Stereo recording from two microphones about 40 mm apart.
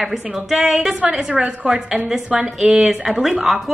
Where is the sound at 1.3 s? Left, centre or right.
Right.